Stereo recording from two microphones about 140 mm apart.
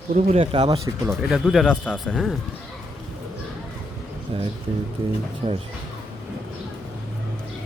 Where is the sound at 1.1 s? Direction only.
Centre (ahead or behind).